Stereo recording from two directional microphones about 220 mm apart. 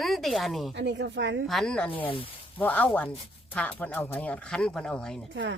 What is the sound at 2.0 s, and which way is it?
Speech, 25° left (ahead or behind).